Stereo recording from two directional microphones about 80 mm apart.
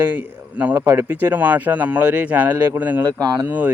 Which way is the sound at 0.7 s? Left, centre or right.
Right.